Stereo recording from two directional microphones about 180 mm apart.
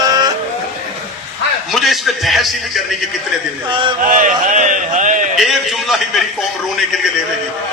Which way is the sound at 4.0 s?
45° right (ahead or behind).